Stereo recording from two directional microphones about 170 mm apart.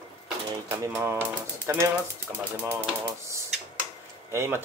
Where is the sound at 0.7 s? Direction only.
15° right (ahead or behind).